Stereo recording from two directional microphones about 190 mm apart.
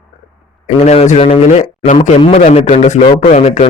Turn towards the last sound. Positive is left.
turn(degrees=35)  # may be behind; listen again after turning